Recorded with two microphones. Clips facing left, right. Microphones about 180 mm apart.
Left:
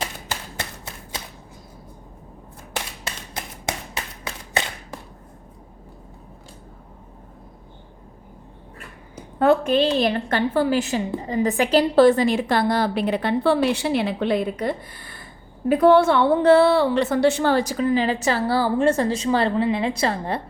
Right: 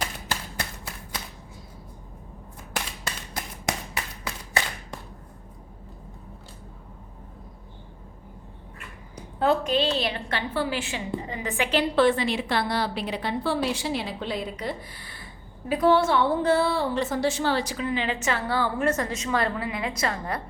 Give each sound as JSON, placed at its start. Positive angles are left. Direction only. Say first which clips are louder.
{"t": 0.3, "sound": "a sound", "louder": "left 1 dB", "side_deg": 25}
{"t": 3.3, "sound": "clapping", "louder": "left 1 dB", "side_deg": 20}
{"t": 9.4, "sound": "a woman's voice", "louder": "left 5 dB", "side_deg": 55}